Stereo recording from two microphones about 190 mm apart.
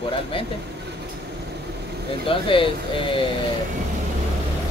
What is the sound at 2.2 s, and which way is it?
Speech, 25° left (ahead or behind).